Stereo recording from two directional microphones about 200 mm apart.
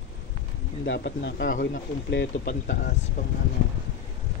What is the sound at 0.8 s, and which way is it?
Speech, 60° left (ahead or behind).